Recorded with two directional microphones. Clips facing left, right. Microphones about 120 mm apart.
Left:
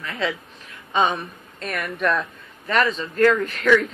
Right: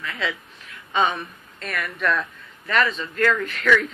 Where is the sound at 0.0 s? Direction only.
35° left (ahead or behind).